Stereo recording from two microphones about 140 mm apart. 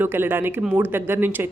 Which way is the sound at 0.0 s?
15° right (ahead or behind).